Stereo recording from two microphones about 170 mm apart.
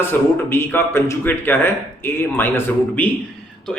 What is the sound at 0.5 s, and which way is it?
A man's voice, 15° left (ahead or behind).